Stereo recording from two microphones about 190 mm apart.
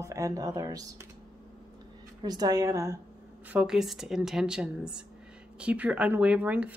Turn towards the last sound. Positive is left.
turn(degrees=-10)  # may be behind; listen again after turning